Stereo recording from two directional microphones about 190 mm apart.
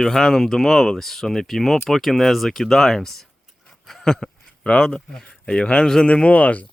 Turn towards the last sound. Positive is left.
turn(degrees=10)  # may be behind; listen again after turning